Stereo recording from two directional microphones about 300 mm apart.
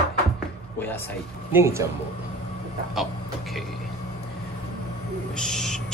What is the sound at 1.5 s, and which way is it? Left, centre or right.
Speech, centre.